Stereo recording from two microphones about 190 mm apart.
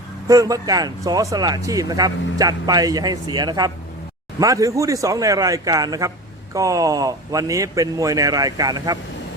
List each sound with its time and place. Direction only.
0.3 s a man's voice: 20° right (ahead or behind)